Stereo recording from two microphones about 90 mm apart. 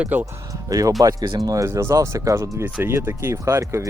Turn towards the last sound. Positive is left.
turn(degrees=-30)  # may be behind; listen again after turning